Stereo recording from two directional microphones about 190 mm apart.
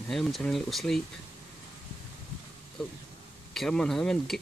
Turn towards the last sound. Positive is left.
turn(degrees=0)  # may be behind; listen again after turning